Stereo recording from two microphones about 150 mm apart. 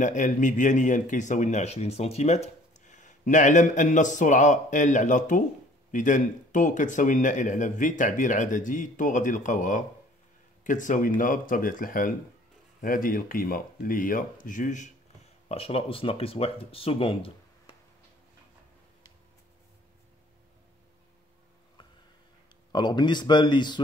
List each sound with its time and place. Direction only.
0.0 s speech: 55° left (ahead or behind)
15.4 s speech: 40° left (ahead or behind)
22.7 s speech: 30° left (ahead or behind)